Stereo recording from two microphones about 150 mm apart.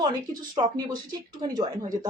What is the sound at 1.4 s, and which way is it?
Speech, 30° right (ahead or behind).